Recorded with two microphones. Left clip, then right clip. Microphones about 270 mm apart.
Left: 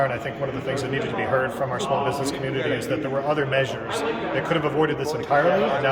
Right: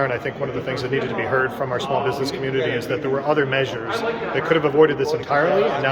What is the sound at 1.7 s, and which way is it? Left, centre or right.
A man's voice, centre.